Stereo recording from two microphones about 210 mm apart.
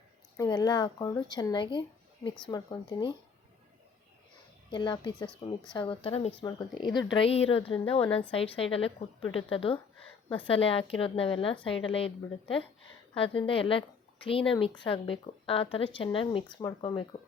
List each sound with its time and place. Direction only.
0.3 s a woman's voice: 20° left (ahead or behind)
4.7 s a woman's voice: 20° left (ahead or behind)